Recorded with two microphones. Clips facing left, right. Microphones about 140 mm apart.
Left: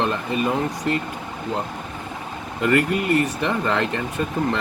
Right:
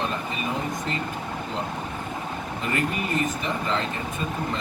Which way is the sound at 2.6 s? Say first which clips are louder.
Left 8 dB; 65° left (ahead or behind).